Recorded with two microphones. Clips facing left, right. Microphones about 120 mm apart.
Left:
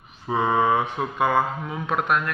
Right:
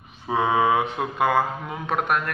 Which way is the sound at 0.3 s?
90° right.